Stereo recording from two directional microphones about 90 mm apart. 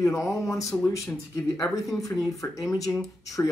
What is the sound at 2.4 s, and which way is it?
Speech, 25° left (ahead or behind).